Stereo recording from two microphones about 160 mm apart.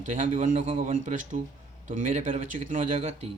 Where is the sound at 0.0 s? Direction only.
50° right (ahead or behind).